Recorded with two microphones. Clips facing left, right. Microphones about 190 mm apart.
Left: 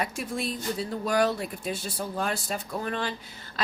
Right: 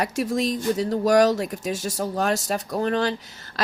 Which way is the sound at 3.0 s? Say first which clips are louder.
Right 8 dB; 75° right (ahead or behind).